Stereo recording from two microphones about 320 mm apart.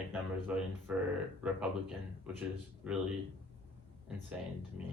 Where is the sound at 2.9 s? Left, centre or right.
Centre.